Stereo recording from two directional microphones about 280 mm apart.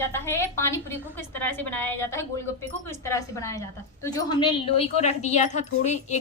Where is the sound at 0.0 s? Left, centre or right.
Centre.